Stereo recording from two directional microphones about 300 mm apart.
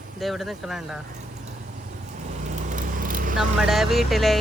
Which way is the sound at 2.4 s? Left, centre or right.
Right.